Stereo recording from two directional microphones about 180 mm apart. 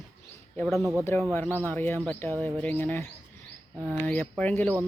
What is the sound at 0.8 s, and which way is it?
Speech, 15° right (ahead or behind).